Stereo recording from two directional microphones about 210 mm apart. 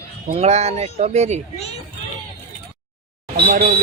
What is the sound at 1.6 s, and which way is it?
Speech, 30° left (ahead or behind).